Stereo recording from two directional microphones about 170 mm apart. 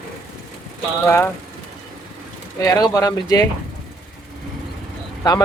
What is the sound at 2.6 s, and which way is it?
Speech, 20° left (ahead or behind).